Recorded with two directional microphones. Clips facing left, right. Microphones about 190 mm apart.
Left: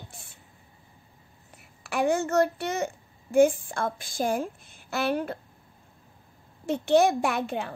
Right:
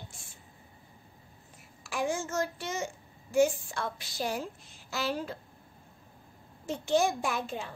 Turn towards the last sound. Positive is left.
turn(degrees=65)  # may be behind; listen again after turning